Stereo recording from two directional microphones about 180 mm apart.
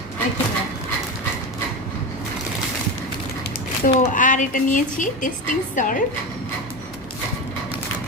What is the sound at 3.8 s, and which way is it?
A woman's voice, 45° left (ahead or behind).